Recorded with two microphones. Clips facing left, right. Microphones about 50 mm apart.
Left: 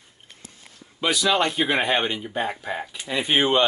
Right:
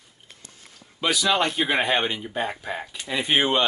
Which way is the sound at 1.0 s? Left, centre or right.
Centre.